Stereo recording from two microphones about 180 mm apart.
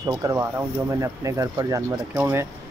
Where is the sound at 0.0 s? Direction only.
15° right (ahead or behind).